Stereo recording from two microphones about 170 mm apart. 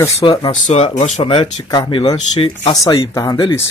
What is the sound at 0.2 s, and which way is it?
Speech, 30° left (ahead or behind).